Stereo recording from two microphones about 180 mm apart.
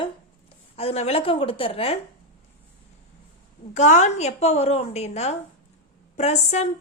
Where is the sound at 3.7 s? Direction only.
40° left (ahead or behind).